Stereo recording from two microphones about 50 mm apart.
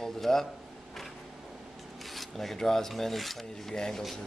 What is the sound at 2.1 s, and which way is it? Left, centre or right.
Speech, centre.